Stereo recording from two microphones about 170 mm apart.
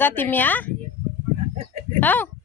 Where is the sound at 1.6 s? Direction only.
35° right (ahead or behind).